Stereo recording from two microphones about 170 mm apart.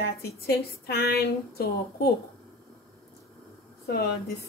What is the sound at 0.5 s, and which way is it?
Speech, 65° left (ahead or behind).